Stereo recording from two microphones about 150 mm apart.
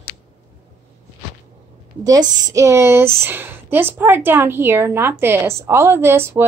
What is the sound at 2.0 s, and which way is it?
A woman's voice, 20° right (ahead or behind).